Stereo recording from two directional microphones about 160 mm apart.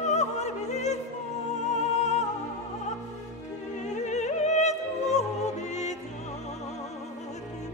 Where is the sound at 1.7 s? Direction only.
45° left (ahead or behind).